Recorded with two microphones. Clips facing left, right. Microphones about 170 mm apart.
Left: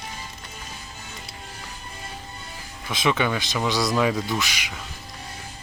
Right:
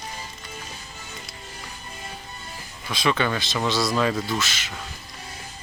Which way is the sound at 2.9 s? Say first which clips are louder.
Even; 20° left (ahead or behind).